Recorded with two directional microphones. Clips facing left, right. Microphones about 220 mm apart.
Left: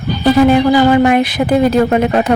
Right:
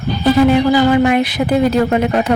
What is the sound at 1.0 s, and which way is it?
Speech, 50° left (ahead or behind).